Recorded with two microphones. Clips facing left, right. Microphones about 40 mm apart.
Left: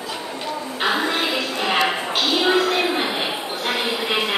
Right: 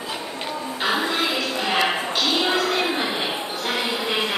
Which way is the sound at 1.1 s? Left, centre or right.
Centre.